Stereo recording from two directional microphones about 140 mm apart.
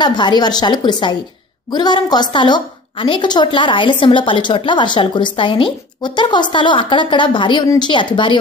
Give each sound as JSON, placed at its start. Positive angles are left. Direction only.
{"t": 0.0, "sound": "a woman's voice", "side_deg": 30}